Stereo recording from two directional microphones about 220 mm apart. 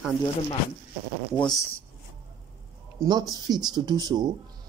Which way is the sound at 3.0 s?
20° right (ahead or behind).